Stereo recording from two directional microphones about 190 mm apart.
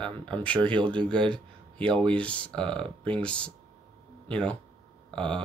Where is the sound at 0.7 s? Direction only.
25° right (ahead or behind).